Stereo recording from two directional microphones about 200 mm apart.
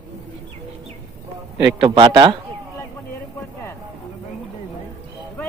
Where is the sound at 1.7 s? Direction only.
25° right (ahead or behind).